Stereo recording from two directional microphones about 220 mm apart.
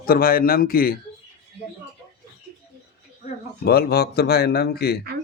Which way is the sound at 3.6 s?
45° left (ahead or behind).